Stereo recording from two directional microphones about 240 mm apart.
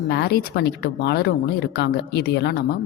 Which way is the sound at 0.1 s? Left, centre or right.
Left.